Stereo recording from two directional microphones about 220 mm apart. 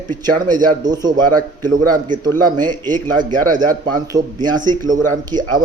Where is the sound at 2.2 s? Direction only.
20° right (ahead or behind).